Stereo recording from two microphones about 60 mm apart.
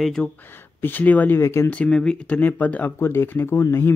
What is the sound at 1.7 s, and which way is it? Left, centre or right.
Speech, centre.